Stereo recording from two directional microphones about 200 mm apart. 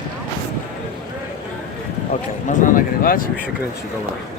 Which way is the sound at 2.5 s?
40° left (ahead or behind).